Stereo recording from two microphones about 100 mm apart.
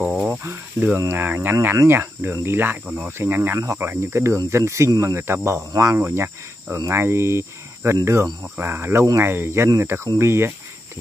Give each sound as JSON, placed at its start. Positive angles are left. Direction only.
{"t": 0.0, "sound": "cricket", "side_deg": -10}
{"t": 0.4, "sound": "cricket", "side_deg": -25}